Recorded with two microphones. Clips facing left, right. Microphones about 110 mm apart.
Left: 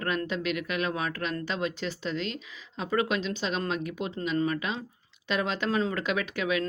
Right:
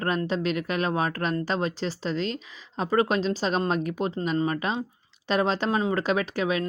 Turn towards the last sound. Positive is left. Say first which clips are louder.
# right 4 dB
turn(degrees=-35)  # may be behind; listen again after turning